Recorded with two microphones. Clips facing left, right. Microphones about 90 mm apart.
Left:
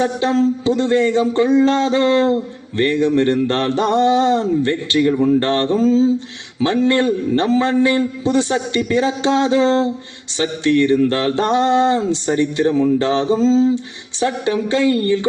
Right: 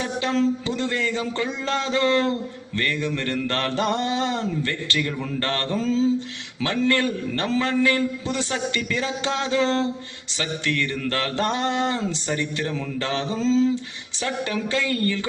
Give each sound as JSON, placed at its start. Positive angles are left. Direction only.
{"t": 0.0, "sound": "mantra", "side_deg": 25}